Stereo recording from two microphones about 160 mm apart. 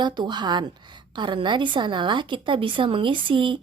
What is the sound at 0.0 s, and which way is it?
A woman's voice, 30° right (ahead or behind).